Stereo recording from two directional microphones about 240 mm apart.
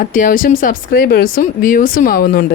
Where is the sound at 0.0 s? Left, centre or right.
Left.